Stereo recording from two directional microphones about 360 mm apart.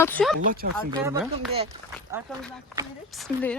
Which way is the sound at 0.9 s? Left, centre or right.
Centre.